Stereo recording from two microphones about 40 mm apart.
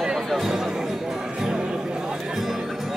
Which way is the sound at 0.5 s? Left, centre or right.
Centre.